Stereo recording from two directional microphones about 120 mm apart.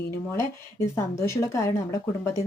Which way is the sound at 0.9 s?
25° left (ahead or behind).